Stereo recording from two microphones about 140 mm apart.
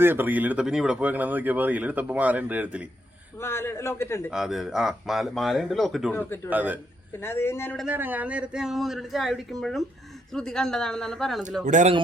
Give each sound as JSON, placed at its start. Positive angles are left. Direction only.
{"t": 0.0, "sound": "speech", "side_deg": -15}
{"t": 3.4, "sound": "a man's voice", "side_deg": 20}
{"t": 4.3, "sound": "speech", "side_deg": -5}
{"t": 6.1, "sound": "speech", "side_deg": 15}
{"t": 6.5, "sound": "speech", "side_deg": -10}
{"t": 7.2, "sound": "speech", "side_deg": 15}
{"t": 7.9, "sound": "speech", "side_deg": -10}
{"t": 11.6, "sound": "speech", "side_deg": -60}